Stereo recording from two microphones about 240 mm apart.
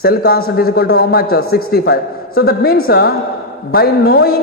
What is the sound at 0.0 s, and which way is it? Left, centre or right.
A man's voice, left.